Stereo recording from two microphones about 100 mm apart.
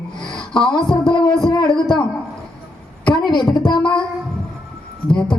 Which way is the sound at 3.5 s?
50° left (ahead or behind).